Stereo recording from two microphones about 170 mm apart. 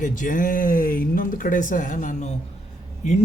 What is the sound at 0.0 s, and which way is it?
A man's voice, 50° left (ahead or behind).